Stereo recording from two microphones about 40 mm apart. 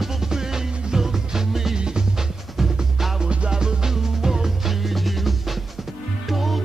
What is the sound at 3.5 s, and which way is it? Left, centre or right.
Music, centre.